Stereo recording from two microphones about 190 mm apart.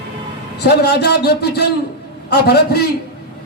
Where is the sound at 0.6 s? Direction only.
60° left (ahead or behind).